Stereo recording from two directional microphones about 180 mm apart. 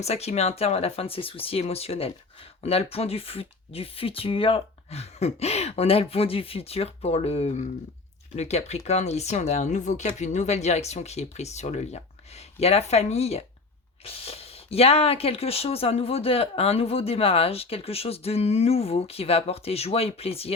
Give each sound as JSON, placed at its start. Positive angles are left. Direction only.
{"t": 0.0, "sound": "speech", "side_deg": 35}